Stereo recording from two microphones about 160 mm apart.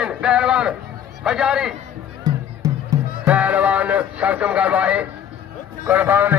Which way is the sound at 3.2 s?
10° right (ahead or behind).